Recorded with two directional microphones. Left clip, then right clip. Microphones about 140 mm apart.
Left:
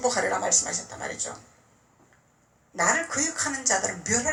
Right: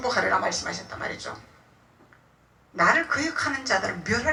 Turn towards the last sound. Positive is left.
turn(degrees=45)  # may be behind; listen again after turning